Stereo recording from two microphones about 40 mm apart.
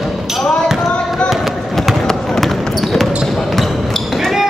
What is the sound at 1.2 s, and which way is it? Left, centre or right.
Basketball bounce, centre.